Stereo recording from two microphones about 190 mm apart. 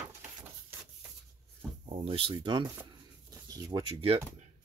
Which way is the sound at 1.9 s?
30° right (ahead or behind).